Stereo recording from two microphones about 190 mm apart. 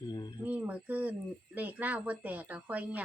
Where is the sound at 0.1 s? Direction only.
25° left (ahead or behind).